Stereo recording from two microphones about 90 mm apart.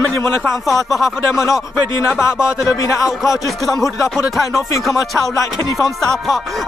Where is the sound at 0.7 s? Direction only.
Centre (ahead or behind).